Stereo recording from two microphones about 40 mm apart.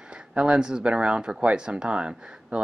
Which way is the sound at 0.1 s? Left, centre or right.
Right.